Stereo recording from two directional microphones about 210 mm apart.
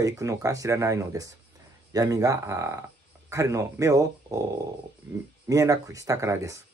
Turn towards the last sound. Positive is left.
turn(degrees=-15)  # may be behind; listen again after turning